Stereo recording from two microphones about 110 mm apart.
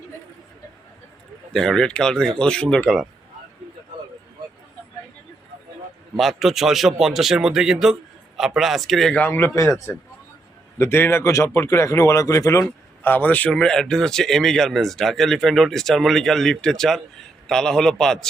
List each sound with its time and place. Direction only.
1.5 s speech: 5° left (ahead or behind)
6.1 s speech: centre (ahead or behind)
9.1 s speech: 15° left (ahead or behind)
10.8 s speech: 20° left (ahead or behind)
13.0 s speech: 15° left (ahead or behind)